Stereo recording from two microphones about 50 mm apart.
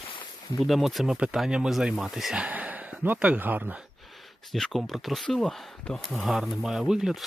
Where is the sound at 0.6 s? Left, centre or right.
Centre.